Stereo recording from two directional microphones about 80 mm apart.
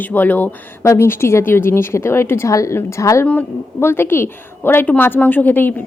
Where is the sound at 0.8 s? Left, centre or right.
Left.